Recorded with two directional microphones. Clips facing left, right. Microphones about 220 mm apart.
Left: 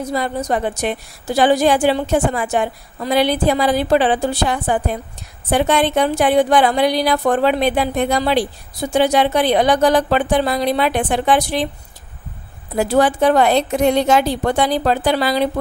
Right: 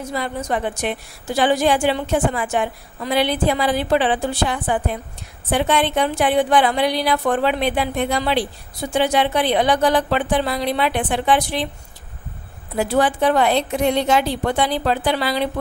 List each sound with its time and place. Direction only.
0.0 s a woman's voice: 40° left (ahead or behind)
12.7 s a woman's voice: 40° left (ahead or behind)